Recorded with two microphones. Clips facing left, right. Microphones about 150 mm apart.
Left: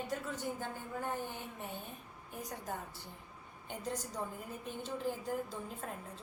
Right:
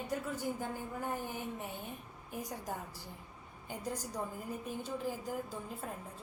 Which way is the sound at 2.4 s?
20° right (ahead or behind).